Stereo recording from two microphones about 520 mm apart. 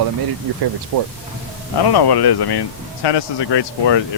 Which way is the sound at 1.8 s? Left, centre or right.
Left.